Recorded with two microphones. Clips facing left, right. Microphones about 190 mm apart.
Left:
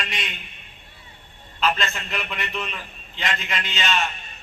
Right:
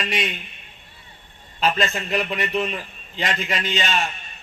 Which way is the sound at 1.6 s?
40° right (ahead or behind).